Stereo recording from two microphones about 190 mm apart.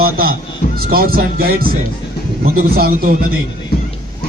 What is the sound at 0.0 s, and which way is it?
Speech, 50° right (ahead or behind).